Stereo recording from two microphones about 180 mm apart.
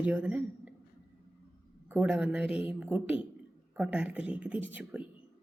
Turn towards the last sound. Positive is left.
turn(degrees=-10)  # may be behind; listen again after turning